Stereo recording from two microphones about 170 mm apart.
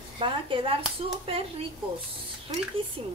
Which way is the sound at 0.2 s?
30° right (ahead or behind).